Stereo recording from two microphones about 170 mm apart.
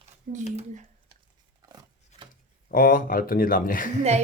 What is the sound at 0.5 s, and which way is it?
Speech, 45° right (ahead or behind).